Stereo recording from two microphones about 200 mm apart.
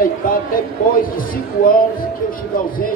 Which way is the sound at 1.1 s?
45° left (ahead or behind).